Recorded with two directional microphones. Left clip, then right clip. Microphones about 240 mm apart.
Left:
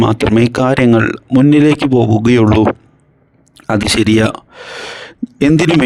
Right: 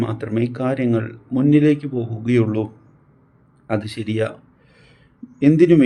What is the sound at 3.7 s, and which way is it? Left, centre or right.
Speech, left.